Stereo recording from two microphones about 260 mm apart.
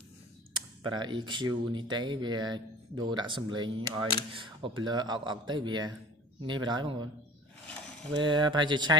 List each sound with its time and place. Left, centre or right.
0.5 s speech: centre
8.1 s speech: centre